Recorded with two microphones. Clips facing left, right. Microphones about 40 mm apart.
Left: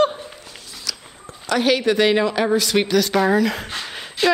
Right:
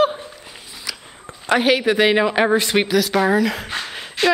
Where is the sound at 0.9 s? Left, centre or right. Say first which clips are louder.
Even; centre.